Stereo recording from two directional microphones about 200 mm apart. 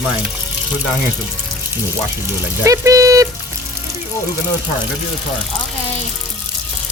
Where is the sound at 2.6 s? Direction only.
15° right (ahead or behind).